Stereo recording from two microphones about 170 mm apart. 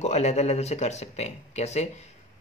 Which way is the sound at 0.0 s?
40° left (ahead or behind).